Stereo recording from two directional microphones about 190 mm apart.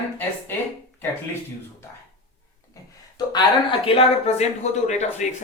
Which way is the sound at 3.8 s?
35° left (ahead or behind).